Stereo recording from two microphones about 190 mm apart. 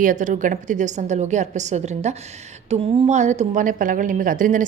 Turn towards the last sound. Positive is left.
turn(degrees=-40)  # may be behind; listen again after turning